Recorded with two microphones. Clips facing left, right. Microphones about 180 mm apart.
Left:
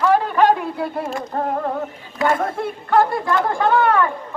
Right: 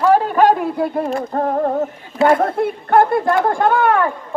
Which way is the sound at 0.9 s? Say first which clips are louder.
Right 5 dB; 40° right (ahead or behind).